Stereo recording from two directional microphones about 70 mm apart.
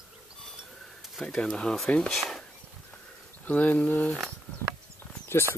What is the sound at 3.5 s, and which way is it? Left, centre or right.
Speech, left.